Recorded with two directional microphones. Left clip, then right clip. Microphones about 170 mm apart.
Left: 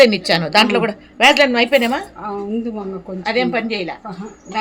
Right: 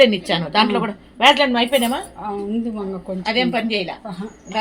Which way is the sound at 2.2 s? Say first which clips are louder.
Left 1 dB; 25° left (ahead or behind).